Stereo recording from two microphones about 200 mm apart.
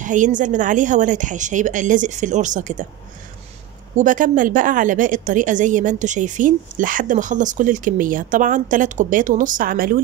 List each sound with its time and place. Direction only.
0.0 s a woman's voice: 40° right (ahead or behind)
3.9 s a woman's voice: 40° right (ahead or behind)